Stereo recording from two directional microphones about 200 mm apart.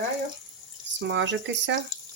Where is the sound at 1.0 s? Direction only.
65° right (ahead or behind).